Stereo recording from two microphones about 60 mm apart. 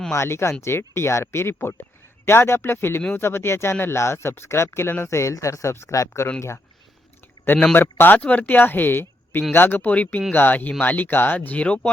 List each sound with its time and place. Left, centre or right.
0.1 s speech: left
5.0 s speech: left
7.8 s speech: left
8.2 s speech: left